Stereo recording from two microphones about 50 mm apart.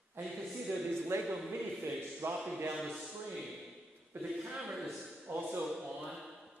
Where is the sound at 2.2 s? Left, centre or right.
Right.